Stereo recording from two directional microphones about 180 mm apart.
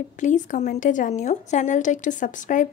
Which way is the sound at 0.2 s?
45° left (ahead or behind).